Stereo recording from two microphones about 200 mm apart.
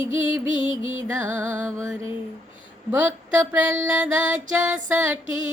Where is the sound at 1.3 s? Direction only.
10° right (ahead or behind).